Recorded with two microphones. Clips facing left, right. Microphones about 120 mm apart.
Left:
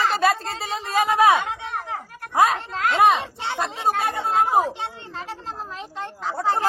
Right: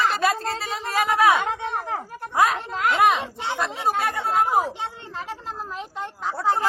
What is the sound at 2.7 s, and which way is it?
Speech, 10° right (ahead or behind).